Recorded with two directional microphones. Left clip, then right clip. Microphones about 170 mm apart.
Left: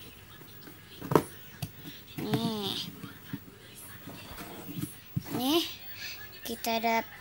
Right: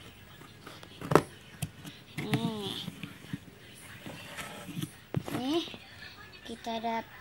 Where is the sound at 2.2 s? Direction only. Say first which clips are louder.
Left 2 dB; 20° left (ahead or behind).